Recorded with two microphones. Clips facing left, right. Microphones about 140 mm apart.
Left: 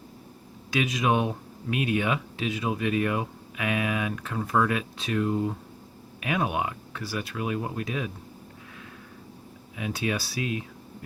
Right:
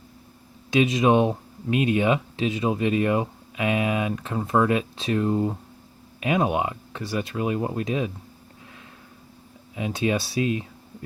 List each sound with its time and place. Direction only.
0.7 s speech: 25° right (ahead or behind)
9.7 s speech: 25° right (ahead or behind)